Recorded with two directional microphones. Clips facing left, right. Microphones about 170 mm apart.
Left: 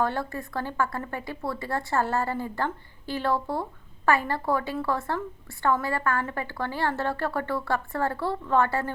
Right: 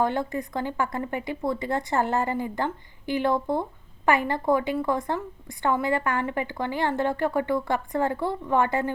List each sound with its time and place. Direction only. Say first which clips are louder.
0.0 s a woman's voice: right 3 dB; 15° right (ahead or behind)